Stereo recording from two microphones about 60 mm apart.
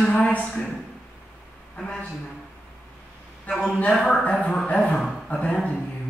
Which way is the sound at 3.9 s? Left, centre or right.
Centre.